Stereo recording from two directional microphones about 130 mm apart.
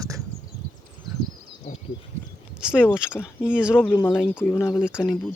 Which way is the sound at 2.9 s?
5° right (ahead or behind).